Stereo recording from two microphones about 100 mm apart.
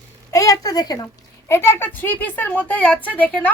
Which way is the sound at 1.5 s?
25° left (ahead or behind).